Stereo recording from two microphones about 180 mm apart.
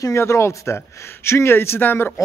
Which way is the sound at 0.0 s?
15° left (ahead or behind).